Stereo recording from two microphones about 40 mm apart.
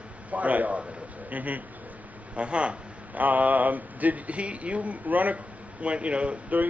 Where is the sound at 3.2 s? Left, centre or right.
Right.